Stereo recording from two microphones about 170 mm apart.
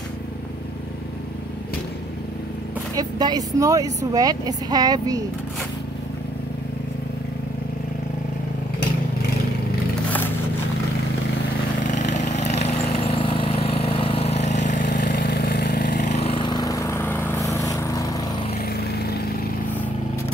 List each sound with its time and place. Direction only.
3.0 s speech: 25° right (ahead or behind)
11.8 s vehicle: 45° left (ahead or behind)
15.0 s vehicle: 65° left (ahead or behind)
16.0 s vehicle: 40° left (ahead or behind); by 18.2 s 20° left (ahead or behind)
18.5 s vehicle: 65° left (ahead or behind)